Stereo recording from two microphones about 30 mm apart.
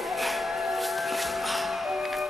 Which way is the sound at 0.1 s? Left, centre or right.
Centre.